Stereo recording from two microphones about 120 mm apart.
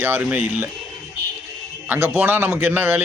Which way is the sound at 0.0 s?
15° right (ahead or behind).